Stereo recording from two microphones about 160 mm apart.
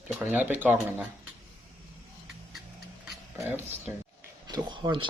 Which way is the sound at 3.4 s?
15° right (ahead or behind).